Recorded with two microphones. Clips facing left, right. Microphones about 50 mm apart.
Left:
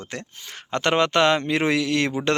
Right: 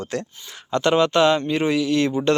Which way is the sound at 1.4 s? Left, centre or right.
Left.